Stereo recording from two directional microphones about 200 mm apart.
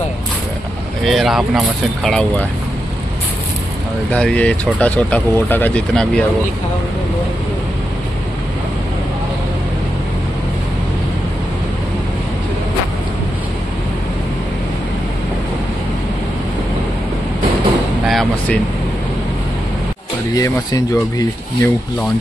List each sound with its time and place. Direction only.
1.0 s speech: centre (ahead or behind)
4.1 s speech: 5° left (ahead or behind)
18.0 s a sound: centre (ahead or behind)
20.3 s speech: 15° left (ahead or behind)